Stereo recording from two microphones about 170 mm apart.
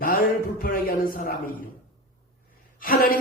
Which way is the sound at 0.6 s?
55° left (ahead or behind).